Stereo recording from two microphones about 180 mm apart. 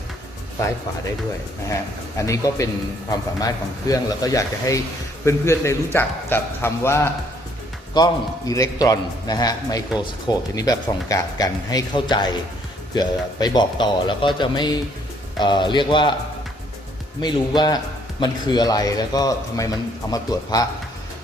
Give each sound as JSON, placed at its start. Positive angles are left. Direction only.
{"t": 2.2, "sound": "a man's voice", "side_deg": 15}
{"t": 17.2, "sound": "a man's voice", "side_deg": 25}